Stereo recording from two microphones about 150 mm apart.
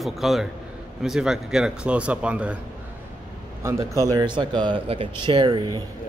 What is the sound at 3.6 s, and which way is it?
Speech, 20° right (ahead or behind).